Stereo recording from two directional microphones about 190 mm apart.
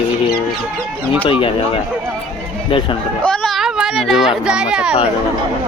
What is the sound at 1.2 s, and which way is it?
Speech, 30° left (ahead or behind).